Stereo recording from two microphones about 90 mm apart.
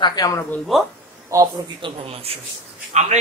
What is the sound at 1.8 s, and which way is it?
Speech, 90° right.